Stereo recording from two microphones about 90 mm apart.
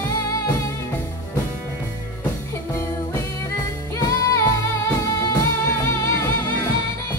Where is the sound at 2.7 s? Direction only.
30° left (ahead or behind).